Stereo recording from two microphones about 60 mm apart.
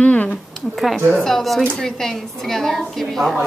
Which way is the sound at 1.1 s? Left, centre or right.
Centre.